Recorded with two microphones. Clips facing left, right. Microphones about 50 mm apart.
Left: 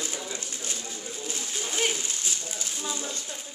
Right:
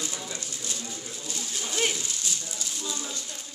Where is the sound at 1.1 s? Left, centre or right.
Left.